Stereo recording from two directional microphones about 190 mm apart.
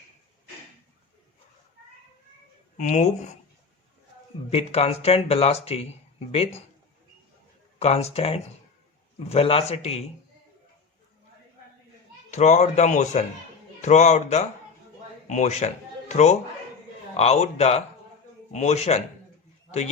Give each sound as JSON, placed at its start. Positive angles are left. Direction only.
{"t": 2.7, "sound": "speech", "side_deg": 40}
{"t": 4.4, "sound": "speech", "side_deg": 30}
{"t": 7.8, "sound": "speech", "side_deg": 35}
{"t": 12.3, "sound": "speech", "side_deg": 35}